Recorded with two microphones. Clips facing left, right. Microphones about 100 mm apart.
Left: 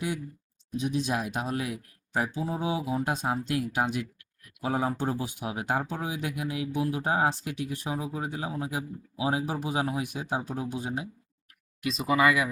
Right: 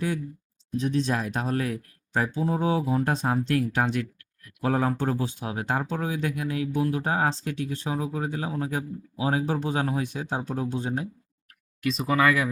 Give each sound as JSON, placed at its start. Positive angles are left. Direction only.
{"t": 0.8, "sound": "speech", "side_deg": 5}